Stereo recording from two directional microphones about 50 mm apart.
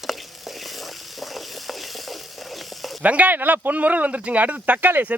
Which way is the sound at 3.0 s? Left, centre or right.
Right.